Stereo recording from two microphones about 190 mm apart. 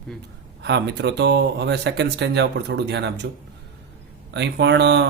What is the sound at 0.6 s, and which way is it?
Speech, 65° right (ahead or behind).